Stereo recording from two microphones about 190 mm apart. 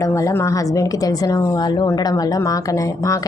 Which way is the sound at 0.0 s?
15° left (ahead or behind).